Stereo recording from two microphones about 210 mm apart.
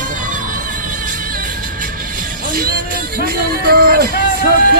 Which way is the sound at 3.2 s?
45° right (ahead or behind).